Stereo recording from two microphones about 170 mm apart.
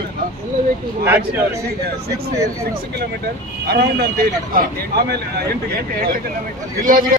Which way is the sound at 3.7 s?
65° right (ahead or behind).